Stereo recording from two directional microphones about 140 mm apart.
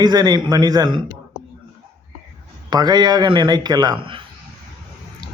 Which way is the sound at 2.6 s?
30° right (ahead or behind).